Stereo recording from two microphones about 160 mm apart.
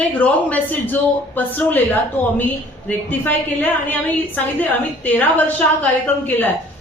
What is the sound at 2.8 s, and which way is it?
A woman's voice, 10° left (ahead or behind).